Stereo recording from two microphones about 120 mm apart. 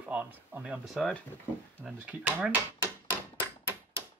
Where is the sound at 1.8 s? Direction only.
10° right (ahead or behind).